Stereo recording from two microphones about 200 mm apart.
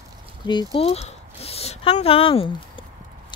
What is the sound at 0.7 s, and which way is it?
Speech, 30° left (ahead or behind).